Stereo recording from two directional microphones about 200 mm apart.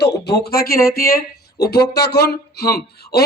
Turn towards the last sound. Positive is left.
turn(degrees=55)  # may be behind; listen again after turning